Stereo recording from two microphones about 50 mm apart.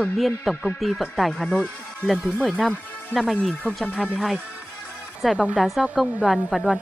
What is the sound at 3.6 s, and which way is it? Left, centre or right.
Speech, centre.